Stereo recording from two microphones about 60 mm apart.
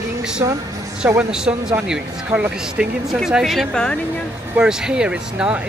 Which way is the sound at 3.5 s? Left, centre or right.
Centre.